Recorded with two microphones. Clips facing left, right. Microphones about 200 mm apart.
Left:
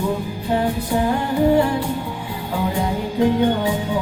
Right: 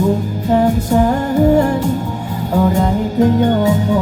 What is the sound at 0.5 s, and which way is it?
Music, 45° right (ahead or behind).